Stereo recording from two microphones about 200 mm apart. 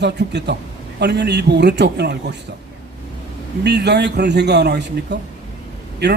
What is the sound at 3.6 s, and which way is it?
A man's voice, 55° right (ahead or behind).